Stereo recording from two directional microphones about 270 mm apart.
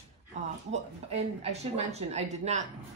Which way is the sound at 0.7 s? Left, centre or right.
Right.